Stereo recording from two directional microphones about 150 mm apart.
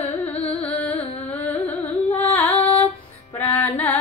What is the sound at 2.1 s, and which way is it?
Female singing, 10° left (ahead or behind).